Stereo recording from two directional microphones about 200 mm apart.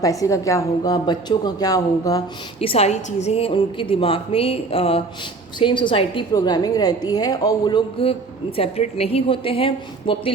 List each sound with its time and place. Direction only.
0.0 s a woman's voice: 15° left (ahead or behind)
2.6 s a woman's voice: 30° left (ahead or behind)